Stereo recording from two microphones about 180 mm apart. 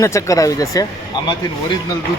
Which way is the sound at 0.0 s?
15° left (ahead or behind).